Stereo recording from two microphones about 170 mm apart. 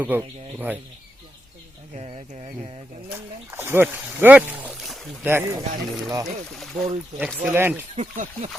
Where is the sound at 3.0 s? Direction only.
15° right (ahead or behind).